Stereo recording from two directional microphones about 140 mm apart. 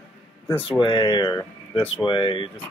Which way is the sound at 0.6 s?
40° left (ahead or behind).